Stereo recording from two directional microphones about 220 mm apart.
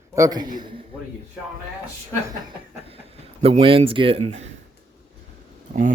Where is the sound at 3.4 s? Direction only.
25° right (ahead or behind).